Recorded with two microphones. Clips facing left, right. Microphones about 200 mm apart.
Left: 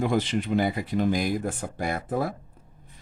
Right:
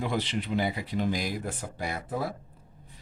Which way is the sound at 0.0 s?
50° left (ahead or behind).